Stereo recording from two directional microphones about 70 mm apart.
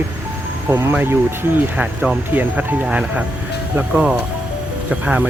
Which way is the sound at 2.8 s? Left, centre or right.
Centre.